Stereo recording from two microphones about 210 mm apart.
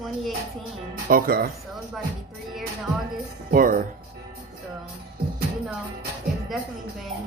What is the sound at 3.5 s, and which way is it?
Speech, 40° right (ahead or behind).